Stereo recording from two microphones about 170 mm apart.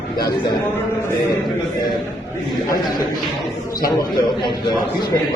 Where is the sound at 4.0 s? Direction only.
25° left (ahead or behind).